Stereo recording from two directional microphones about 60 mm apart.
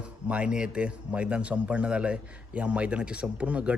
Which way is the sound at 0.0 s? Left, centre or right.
Right.